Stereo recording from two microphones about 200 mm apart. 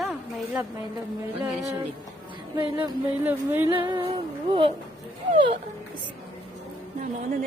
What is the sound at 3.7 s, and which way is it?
Speech, 25° right (ahead or behind).